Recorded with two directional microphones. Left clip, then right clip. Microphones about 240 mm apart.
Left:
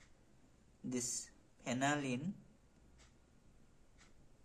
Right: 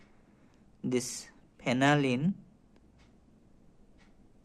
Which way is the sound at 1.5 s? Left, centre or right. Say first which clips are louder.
Right 11 dB; right.